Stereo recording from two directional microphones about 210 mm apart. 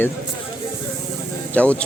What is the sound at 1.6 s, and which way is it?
Speech, 5° left (ahead or behind).